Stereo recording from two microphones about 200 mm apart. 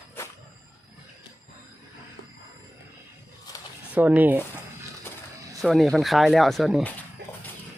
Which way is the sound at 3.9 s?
5° right (ahead or behind).